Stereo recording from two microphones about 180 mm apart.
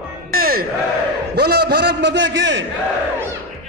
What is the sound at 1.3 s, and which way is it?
A man's voice, 65° right (ahead or behind).